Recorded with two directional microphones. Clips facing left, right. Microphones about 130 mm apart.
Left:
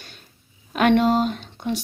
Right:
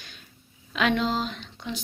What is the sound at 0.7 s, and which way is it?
Speech, 55° left (ahead or behind).